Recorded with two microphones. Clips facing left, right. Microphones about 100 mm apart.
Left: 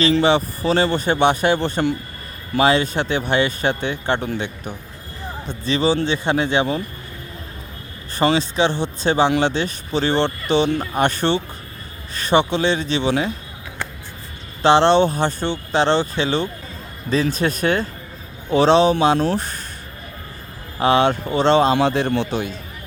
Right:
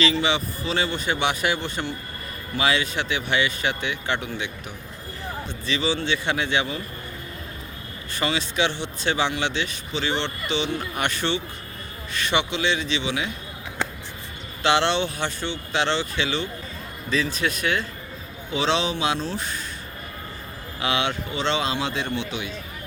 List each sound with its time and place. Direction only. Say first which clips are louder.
0.0 s a man's voice: left 7 dB; 45° left (ahead or behind)
5.5 s speech: left 7 dB; 40° left (ahead or behind)
8.1 s a man's voice: left 8 dB; 35° left (ahead or behind)
14.6 s a man's voice: left 8 dB; 35° left (ahead or behind)
20.7 s a man's voice: left 9 dB; 40° left (ahead or behind)